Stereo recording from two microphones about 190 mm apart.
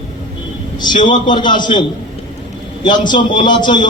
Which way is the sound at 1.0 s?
25° left (ahead or behind).